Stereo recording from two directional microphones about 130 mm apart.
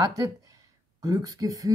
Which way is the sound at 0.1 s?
30° right (ahead or behind).